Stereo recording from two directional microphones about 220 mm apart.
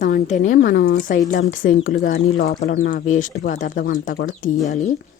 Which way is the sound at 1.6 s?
50° left (ahead or behind).